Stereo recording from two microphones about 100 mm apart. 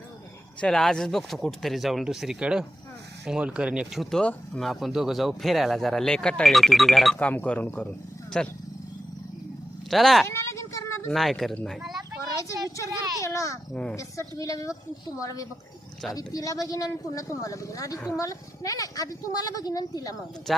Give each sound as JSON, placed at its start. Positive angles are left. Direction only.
{"t": 0.6, "sound": "speech", "side_deg": 5}
{"t": 4.2, "sound": "speech", "side_deg": 10}
{"t": 7.2, "sound": "speech", "side_deg": 15}
{"t": 9.9, "sound": "speech", "side_deg": 0}
{"t": 10.2, "sound": "a sound", "side_deg": 25}
{"t": 11.1, "sound": "speech", "side_deg": 0}
{"t": 11.8, "sound": "a sound", "side_deg": -5}
{"t": 12.3, "sound": "a sound", "side_deg": 30}
{"t": 13.2, "sound": "a woman's voice", "side_deg": 30}
{"t": 20.5, "sound": "speech", "side_deg": 0}